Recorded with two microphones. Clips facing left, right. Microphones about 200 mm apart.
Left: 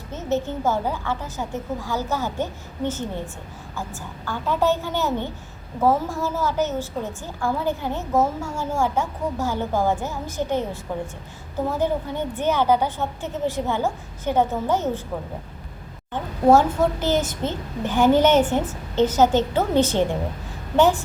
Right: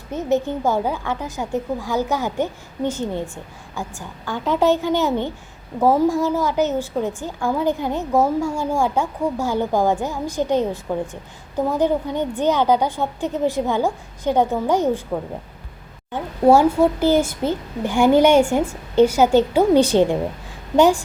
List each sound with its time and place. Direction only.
0.1 s a woman's voice: 15° right (ahead or behind)
16.1 s a woman's voice: 10° right (ahead or behind)